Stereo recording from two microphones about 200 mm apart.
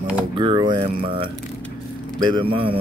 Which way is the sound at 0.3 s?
25° right (ahead or behind).